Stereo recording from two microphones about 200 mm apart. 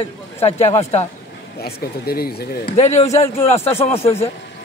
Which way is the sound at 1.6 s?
50° left (ahead or behind).